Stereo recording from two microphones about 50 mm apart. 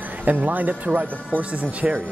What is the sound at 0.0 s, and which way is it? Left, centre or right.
Speech, right.